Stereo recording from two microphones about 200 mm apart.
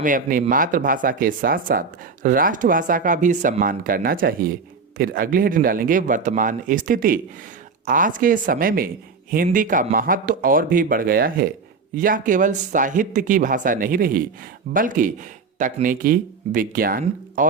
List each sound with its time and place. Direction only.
0.0 s speech: 40° right (ahead or behind)